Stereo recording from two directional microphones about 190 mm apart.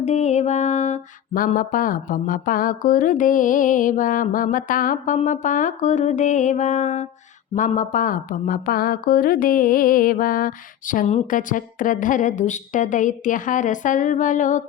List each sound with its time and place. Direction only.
0.0 s mantra: 35° left (ahead or behind)